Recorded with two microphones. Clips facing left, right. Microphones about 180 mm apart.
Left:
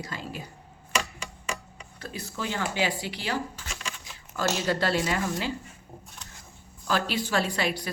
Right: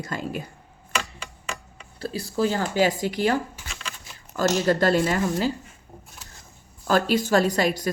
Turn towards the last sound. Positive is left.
turn(degrees=-45)  # may be behind; listen again after turning